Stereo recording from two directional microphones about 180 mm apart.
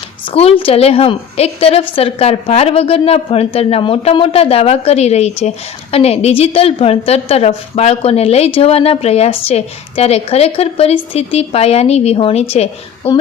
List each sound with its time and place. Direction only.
0.3 s a woman's voice: 35° left (ahead or behind)